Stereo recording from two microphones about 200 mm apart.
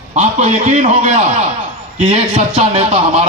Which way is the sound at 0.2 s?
35° right (ahead or behind).